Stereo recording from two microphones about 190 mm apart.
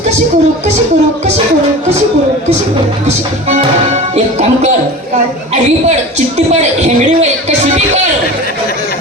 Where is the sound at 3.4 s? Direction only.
35° right (ahead or behind).